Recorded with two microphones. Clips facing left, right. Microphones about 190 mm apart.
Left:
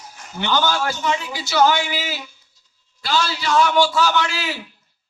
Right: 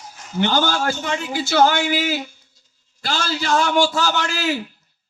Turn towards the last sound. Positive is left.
turn(degrees=-45)  # may be behind; listen again after turning